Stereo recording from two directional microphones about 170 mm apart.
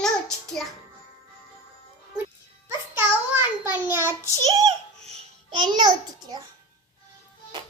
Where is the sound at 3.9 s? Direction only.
15° right (ahead or behind).